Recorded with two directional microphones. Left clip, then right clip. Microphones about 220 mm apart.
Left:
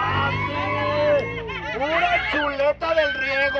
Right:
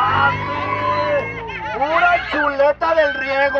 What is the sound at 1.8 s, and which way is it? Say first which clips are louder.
Speech: right 5 dB; 5° left (ahead or behind).